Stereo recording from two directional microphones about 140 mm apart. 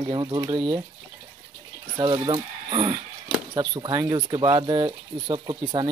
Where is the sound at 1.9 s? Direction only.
35° right (ahead or behind).